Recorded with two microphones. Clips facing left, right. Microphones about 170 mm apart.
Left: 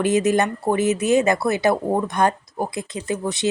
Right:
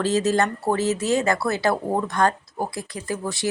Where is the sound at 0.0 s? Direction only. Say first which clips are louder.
Left 2 dB; 15° left (ahead or behind).